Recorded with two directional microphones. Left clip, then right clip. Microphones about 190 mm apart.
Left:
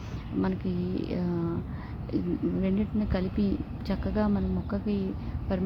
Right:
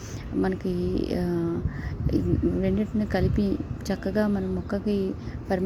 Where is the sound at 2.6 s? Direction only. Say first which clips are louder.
Right 3 dB; 20° right (ahead or behind).